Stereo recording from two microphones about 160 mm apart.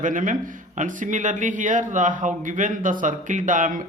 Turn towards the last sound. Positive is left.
turn(degrees=-55)  # may be behind; listen again after turning